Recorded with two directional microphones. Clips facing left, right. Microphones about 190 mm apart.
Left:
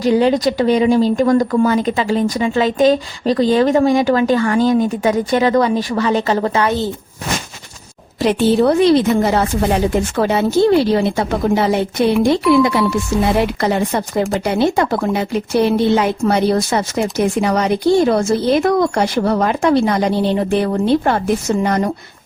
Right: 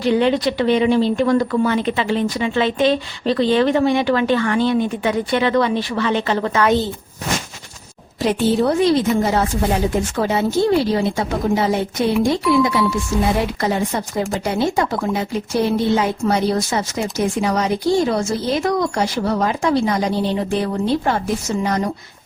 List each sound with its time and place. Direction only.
0.0 s a woman's voice: 35° left (ahead or behind)
8.2 s speech: 75° left (ahead or behind); by 21.9 s 55° left (ahead or behind)